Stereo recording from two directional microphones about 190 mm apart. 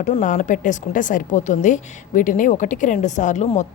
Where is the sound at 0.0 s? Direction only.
40° left (ahead or behind).